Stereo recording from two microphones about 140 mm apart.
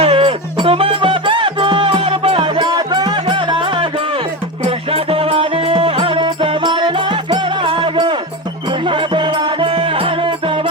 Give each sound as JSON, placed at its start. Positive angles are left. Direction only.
{"t": 0.0, "sound": "music", "side_deg": -40}